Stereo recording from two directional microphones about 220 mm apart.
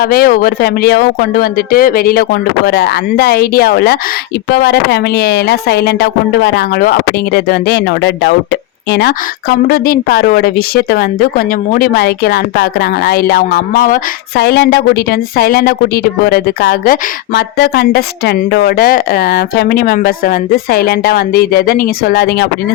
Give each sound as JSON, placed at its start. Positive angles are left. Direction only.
{"t": 0.0, "sound": "speech", "side_deg": 40}